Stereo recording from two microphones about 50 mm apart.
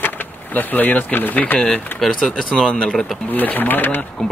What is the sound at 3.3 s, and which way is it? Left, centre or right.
Speech, left.